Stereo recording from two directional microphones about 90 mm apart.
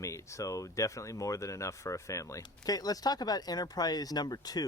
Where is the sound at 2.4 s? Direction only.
45° left (ahead or behind).